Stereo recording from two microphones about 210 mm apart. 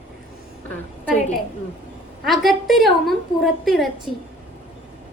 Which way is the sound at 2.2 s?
Centre (ahead or behind).